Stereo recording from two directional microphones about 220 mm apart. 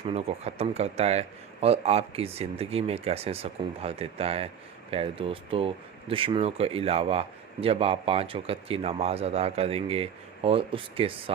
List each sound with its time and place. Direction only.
0.0 s speech: 25° right (ahead or behind)